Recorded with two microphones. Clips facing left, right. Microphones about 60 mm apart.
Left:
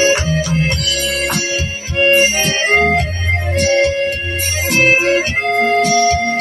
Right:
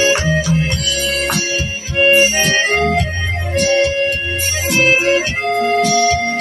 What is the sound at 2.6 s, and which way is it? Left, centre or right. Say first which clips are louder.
Organ: left 3 dB; left.